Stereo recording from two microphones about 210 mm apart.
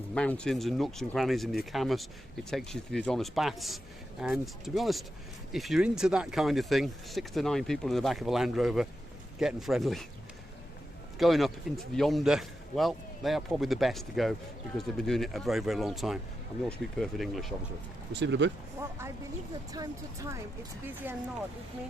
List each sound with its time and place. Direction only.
0.1 s speech: 5° left (ahead or behind)
11.2 s speech: centre (ahead or behind)
18.1 s speech: 55° right (ahead or behind)
18.8 s speech: 15° right (ahead or behind)